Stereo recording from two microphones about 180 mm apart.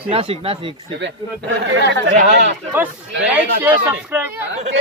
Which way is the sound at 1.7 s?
80° right.